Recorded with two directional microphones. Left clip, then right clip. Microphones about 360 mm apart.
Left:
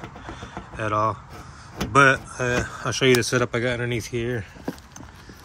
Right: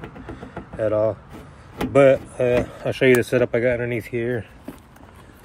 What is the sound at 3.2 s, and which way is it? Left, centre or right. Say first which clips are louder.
Speech: right 4 dB; centre.